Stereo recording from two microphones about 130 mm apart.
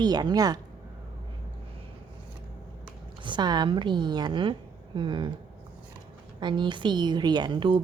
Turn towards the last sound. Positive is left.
turn(degrees=-40)  # may be behind; listen again after turning